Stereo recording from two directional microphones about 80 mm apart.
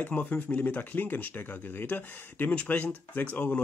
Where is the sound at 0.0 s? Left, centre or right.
Centre.